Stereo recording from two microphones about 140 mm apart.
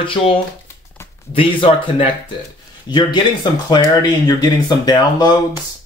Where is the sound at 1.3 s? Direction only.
40° left (ahead or behind).